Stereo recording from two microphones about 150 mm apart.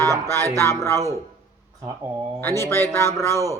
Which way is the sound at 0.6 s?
20° left (ahead or behind).